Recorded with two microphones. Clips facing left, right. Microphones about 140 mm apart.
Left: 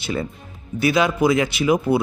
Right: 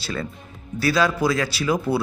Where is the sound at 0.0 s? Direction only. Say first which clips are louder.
Left 4 dB; 20° left (ahead or behind).